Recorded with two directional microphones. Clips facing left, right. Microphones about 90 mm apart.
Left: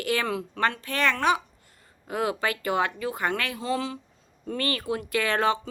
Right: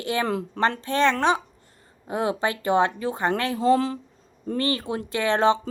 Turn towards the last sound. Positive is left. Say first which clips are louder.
# right 4 dB
turn(degrees=-25)  # may be behind; listen again after turning